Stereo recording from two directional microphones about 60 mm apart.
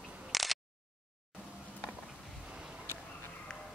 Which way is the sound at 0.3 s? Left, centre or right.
Centre.